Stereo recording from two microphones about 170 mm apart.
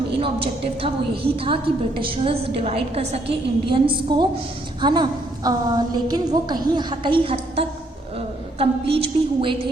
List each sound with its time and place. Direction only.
0.1 s a woman's voice: 30° right (ahead or behind)